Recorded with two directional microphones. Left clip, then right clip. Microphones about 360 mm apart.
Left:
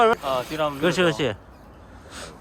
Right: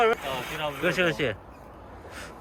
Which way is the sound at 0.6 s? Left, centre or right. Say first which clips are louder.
Left 3 dB; centre.